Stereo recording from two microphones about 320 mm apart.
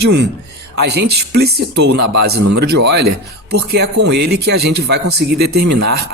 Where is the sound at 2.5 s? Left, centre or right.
Right.